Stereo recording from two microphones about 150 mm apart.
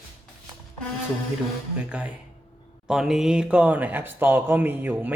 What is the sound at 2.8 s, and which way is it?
Speech, 5° right (ahead or behind).